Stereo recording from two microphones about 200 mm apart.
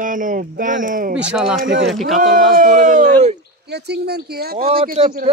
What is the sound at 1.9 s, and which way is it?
Speech, centre (ahead or behind).